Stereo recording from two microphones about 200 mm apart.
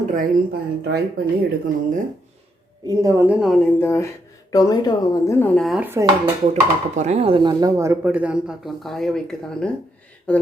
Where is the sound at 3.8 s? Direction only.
10° left (ahead or behind).